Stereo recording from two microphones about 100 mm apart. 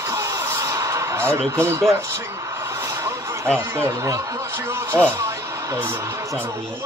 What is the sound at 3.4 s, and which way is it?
Speech, 25° right (ahead or behind).